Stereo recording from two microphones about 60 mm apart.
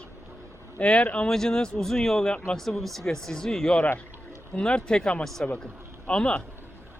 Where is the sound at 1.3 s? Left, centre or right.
Centre.